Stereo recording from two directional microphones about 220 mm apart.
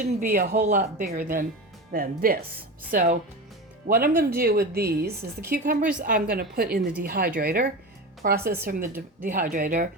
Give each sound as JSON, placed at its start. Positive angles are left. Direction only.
{"t": 0.0, "sound": "a woman's voice", "side_deg": -35}